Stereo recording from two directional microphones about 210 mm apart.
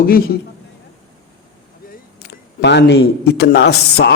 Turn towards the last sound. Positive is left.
turn(degrees=55)  # may be behind; listen again after turning